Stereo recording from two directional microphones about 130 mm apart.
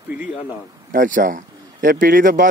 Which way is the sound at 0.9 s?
90° right.